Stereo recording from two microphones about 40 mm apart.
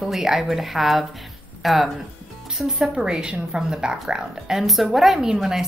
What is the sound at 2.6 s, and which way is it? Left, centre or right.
A woman's voice, centre.